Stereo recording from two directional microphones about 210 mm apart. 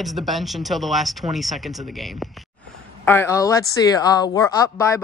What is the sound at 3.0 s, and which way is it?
Speech, 10° left (ahead or behind).